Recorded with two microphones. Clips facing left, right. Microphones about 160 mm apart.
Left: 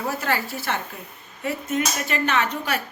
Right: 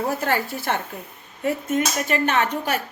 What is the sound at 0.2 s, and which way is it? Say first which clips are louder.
Speech: right 2 dB; 50° right (ahead or behind).